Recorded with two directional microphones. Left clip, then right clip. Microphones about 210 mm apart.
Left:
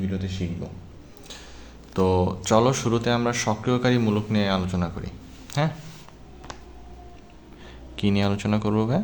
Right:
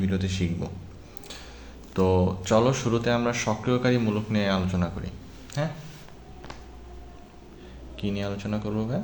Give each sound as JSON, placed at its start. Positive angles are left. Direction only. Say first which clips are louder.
{"t": 0.0, "sound": "a man's voice", "louder": "right 2 dB", "side_deg": -15}
{"t": 1.9, "sound": "speech", "louder": "left 1 dB", "side_deg": 15}
{"t": 5.6, "sound": "speech", "louder": "left 4 dB", "side_deg": 25}
{"t": 7.9, "sound": "speech", "louder": "left 6 dB", "side_deg": 30}